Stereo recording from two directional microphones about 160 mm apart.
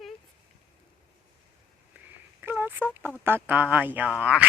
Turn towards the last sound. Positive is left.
turn(degrees=-5)  # may be behind; listen again after turning